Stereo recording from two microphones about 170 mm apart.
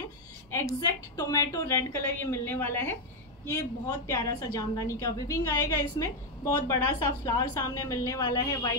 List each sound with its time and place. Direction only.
0.7 s a woman's voice: 20° left (ahead or behind)